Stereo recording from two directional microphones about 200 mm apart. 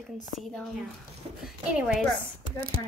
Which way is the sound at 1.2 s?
25° right (ahead or behind).